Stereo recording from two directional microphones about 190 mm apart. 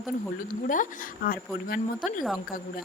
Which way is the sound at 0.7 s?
45° left (ahead or behind).